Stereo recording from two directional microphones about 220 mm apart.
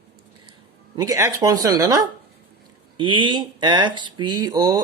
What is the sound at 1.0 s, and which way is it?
Speech, 15° right (ahead or behind).